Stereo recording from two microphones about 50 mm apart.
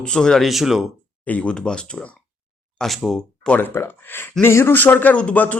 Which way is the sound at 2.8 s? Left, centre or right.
Centre.